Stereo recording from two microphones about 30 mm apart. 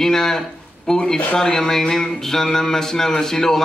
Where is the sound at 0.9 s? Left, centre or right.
Centre.